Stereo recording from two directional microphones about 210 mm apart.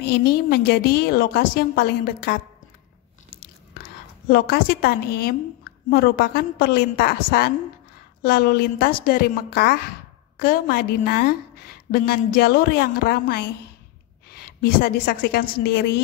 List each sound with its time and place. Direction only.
0.1 s a woman's voice: 45° left (ahead or behind)
4.3 s a woman's voice: 45° left (ahead or behind)